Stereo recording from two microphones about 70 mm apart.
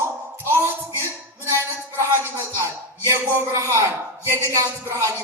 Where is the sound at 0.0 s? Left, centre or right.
Right.